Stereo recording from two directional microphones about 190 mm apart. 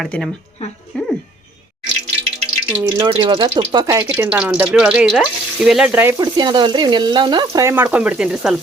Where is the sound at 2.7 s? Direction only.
10° right (ahead or behind).